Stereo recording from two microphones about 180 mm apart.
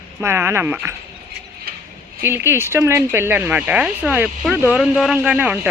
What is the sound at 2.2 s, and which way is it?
Speech, 15° right (ahead or behind).